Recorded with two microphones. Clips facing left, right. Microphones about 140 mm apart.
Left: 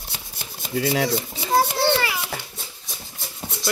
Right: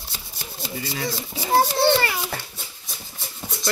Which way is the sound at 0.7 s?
75° left (ahead or behind).